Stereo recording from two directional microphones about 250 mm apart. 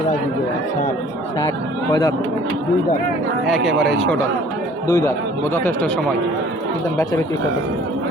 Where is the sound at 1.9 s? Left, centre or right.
Centre.